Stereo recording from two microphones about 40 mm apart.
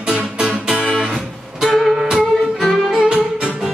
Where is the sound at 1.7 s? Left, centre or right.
Centre.